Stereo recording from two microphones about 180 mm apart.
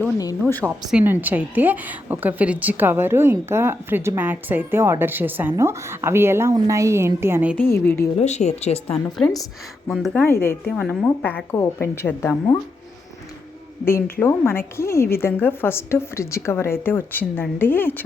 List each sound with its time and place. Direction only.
0.7 s a woman's voice: 5° right (ahead or behind)
7.5 s a woman's voice: 10° left (ahead or behind)
8.2 s speech: 40° left (ahead or behind)
9.1 s a woman's voice: centre (ahead or behind)
10.2 s a woman's voice: 15° left (ahead or behind)
13.8 s a woman's voice: 15° left (ahead or behind)